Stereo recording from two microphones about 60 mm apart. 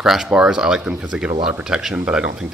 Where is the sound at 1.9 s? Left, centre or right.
Right.